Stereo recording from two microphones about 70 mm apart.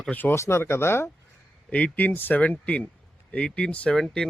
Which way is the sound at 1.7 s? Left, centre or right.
Centre.